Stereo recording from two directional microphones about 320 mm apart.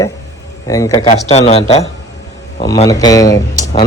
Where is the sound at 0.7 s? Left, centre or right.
Centre.